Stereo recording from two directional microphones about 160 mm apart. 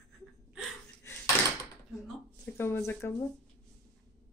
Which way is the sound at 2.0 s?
Centre (ahead or behind).